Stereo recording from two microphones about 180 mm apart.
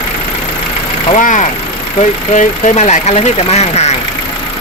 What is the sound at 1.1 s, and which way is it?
Speech, 45° left (ahead or behind).